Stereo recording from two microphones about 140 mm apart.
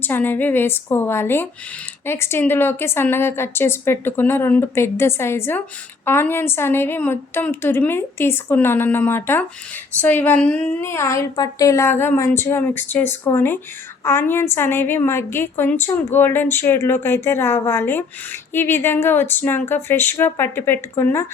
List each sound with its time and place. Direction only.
0.0 s a woman's voice: 15° left (ahead or behind)